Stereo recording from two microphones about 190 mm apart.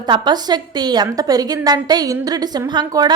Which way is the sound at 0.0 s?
20° right (ahead or behind).